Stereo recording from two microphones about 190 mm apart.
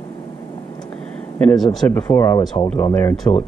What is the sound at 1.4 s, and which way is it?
Speech, 5° left (ahead or behind).